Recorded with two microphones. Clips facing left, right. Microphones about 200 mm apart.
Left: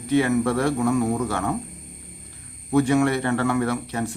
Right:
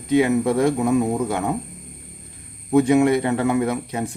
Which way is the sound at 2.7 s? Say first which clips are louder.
Right 3 dB; 20° right (ahead or behind).